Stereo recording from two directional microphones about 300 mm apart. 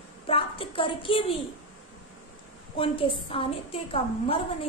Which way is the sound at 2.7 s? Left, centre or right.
Centre.